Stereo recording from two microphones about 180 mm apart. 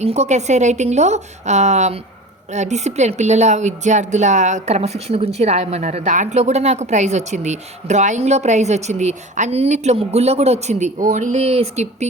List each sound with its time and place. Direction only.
0.0 s speech: 35° right (ahead or behind)